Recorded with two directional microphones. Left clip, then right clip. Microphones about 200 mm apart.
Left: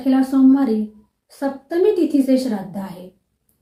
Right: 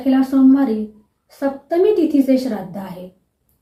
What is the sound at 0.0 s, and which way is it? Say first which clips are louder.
A woman's voice: right 1 dB; 5° left (ahead or behind).